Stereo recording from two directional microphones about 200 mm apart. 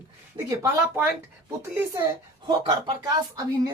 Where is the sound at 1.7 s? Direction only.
15° right (ahead or behind).